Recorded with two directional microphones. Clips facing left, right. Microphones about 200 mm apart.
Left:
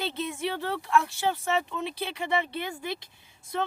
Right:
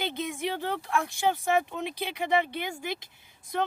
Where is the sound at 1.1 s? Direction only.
15° right (ahead or behind).